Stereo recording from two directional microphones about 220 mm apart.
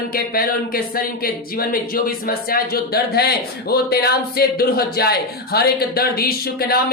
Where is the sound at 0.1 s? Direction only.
40° left (ahead or behind).